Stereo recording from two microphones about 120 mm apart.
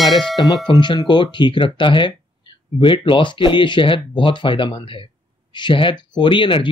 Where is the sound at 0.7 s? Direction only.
40° left (ahead or behind).